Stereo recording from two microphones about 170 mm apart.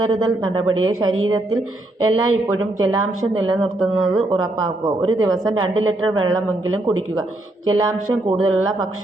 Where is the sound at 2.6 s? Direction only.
20° right (ahead or behind).